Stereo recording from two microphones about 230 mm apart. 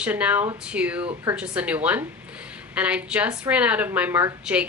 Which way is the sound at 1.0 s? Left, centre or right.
Right.